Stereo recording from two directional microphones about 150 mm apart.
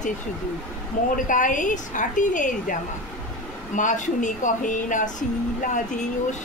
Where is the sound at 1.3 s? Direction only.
60° left (ahead or behind).